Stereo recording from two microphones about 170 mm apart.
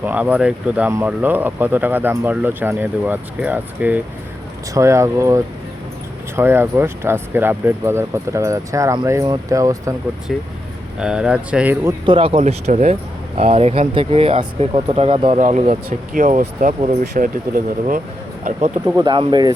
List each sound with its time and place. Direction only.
0.0 s speech: 10° right (ahead or behind)
11.0 s speech: 5° right (ahead or behind)
12.0 s speech: 30° right (ahead or behind)
15.4 s speech: 45° right (ahead or behind)
18.4 s speech: 40° right (ahead or behind)
18.9 s speech: 25° right (ahead or behind)